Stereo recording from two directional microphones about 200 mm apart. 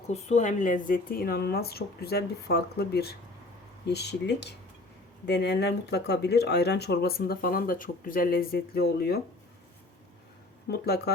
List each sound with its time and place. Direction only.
0.1 s speech: 35° left (ahead or behind); by 9.2 s 50° left (ahead or behind)
10.7 s speech: 55° left (ahead or behind)